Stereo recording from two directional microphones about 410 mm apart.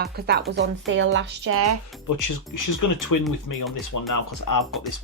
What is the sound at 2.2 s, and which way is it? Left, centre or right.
Speech, left.